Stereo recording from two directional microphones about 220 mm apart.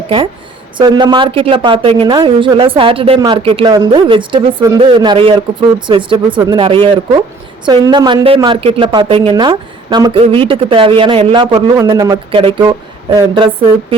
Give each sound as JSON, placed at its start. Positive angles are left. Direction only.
{"t": 0.8, "sound": "speech", "side_deg": -20}